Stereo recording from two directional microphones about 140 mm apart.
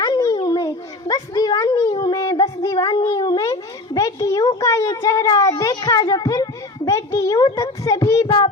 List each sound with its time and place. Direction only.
0.0 s babbling: 25° left (ahead or behind)
0.4 s a sound: 25° left (ahead or behind)
3.1 s a child's voice: 30° left (ahead or behind)